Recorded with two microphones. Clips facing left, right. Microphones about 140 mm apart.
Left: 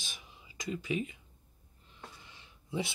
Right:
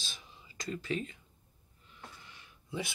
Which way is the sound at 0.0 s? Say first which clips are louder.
Even; 15° left (ahead or behind).